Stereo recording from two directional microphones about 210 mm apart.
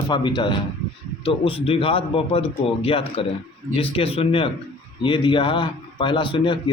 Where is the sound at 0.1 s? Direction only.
20° left (ahead or behind).